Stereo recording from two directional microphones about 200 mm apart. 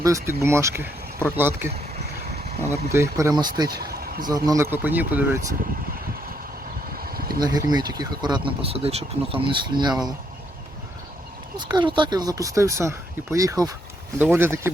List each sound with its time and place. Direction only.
0.0 s speech: 15° right (ahead or behind)
2.9 s speech: 15° right (ahead or behind)
3.7 s a sound: 50° right (ahead or behind)
4.3 s speech: 20° right (ahead or behind)
6.9 s vehicle: 50° right (ahead or behind)
7.3 s speech: 20° right (ahead or behind)
11.5 s speech: 20° right (ahead or behind)